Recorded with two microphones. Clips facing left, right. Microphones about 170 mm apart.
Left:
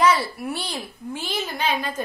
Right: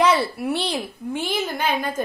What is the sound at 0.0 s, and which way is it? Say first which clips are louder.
A child's voice: right 1 dB; 60° right (ahead or behind).